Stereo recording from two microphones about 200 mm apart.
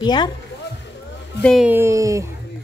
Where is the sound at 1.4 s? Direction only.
5° left (ahead or behind).